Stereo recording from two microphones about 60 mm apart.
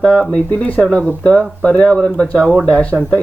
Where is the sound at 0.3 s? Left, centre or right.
Left.